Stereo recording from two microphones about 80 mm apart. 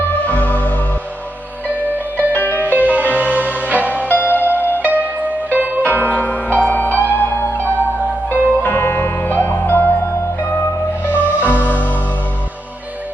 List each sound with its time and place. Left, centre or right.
0.1 s music: centre
1.6 s music: right
2.3 s music: left
2.6 s music: centre
4.1 s music: left
4.8 s music: centre
6.1 s music: centre
11.0 s music: left